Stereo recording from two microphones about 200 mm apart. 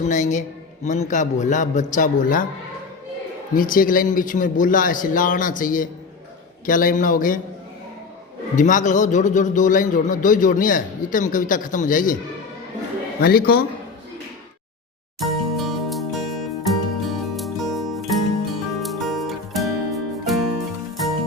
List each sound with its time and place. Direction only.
0.0 s a man's voice: 35° left (ahead or behind)
3.5 s a man's voice: 45° left (ahead or behind)
8.5 s a man's voice: 40° left (ahead or behind)
13.2 s speech: 50° left (ahead or behind)
15.2 s music: centre (ahead or behind)